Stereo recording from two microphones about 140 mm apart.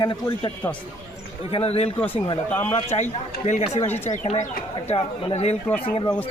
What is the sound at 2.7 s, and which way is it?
A man's voice, 45° left (ahead or behind).